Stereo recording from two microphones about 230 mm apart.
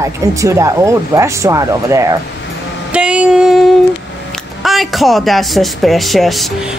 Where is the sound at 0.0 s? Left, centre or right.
Centre.